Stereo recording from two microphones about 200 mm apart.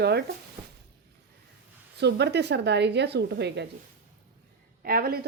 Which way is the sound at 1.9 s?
55° right (ahead or behind).